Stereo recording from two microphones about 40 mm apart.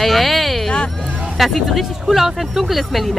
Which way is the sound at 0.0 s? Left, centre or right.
Centre.